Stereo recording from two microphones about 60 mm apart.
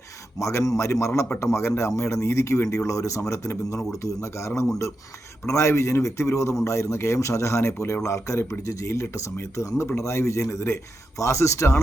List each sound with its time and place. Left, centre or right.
0.3 s speech: left